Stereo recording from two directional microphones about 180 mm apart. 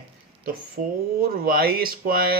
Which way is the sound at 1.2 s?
55° right (ahead or behind).